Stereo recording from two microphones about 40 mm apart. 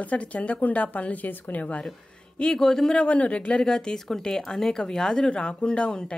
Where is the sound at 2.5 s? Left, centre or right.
Centre.